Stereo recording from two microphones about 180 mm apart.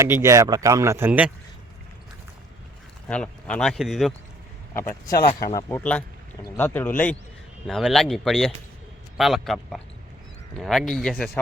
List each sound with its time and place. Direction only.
0.0 s speech: 15° right (ahead or behind)
3.1 s speech: 5° left (ahead or behind)
4.7 s speech: 15° left (ahead or behind)